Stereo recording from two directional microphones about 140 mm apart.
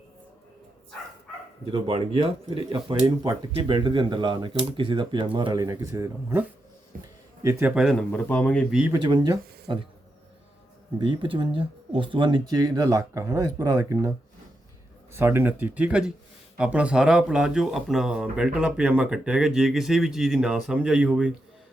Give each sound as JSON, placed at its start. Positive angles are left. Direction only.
{"t": 1.7, "sound": "speech", "side_deg": -40}
{"t": 6.9, "sound": "speech", "side_deg": -85}
{"t": 7.4, "sound": "speech", "side_deg": -20}
{"t": 7.7, "sound": "speech", "side_deg": 0}
{"t": 8.1, "sound": "speech", "side_deg": 10}
{"t": 8.9, "sound": "speech", "side_deg": -35}
{"t": 10.9, "sound": "speech", "side_deg": -35}
{"t": 15.1, "sound": "speech", "side_deg": -15}